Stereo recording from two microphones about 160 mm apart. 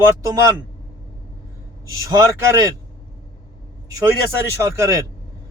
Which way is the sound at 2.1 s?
20° right (ahead or behind).